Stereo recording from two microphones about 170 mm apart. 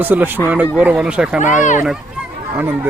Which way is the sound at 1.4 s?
45° left (ahead or behind).